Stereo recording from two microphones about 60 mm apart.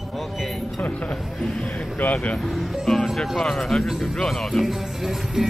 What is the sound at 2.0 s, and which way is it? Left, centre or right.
Speech, left.